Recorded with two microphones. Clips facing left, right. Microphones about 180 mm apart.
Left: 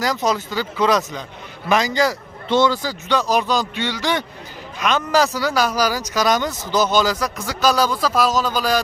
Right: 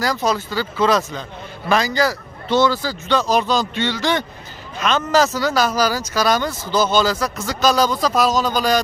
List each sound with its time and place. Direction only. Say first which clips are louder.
0.0 s a man's voice: even; 20° left (ahead or behind)